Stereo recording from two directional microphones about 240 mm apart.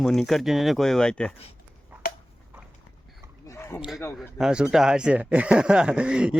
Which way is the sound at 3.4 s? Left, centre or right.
Centre.